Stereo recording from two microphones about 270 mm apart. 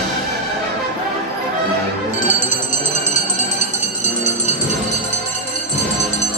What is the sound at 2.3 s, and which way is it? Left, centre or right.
Music, left.